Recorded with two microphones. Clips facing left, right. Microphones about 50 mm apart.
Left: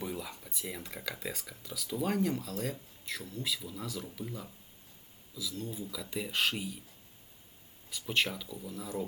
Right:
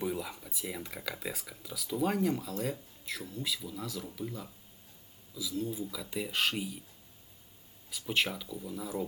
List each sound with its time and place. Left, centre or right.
0.0 s speech: centre
5.3 s speech: centre
7.9 s speech: centre